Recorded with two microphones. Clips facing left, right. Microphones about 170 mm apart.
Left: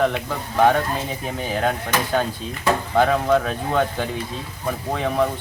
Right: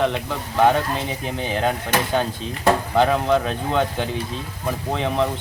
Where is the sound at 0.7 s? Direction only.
15° right (ahead or behind).